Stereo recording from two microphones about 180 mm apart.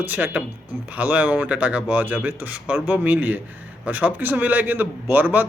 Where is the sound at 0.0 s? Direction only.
10° right (ahead or behind).